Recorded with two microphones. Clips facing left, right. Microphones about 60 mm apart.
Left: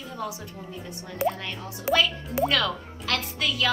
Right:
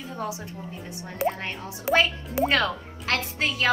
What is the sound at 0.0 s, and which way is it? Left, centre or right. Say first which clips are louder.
A woman's voice: right 1 dB; right.